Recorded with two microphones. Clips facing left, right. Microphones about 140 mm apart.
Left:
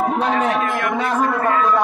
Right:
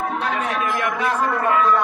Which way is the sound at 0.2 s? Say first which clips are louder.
Left 5 dB; 30° left (ahead or behind).